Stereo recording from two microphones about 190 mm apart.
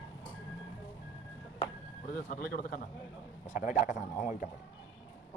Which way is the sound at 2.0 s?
45° left (ahead or behind).